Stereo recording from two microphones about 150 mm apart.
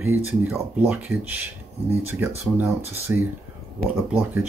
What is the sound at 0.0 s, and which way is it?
Speech, 15° right (ahead or behind).